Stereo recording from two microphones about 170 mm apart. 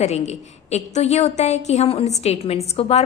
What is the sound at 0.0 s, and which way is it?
A woman's voice, 40° left (ahead or behind).